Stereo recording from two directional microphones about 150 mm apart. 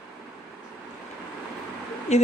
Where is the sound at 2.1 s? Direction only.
50° left (ahead or behind).